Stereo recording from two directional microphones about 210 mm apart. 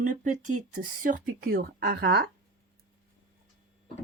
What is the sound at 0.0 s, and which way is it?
Speech, 35° right (ahead or behind).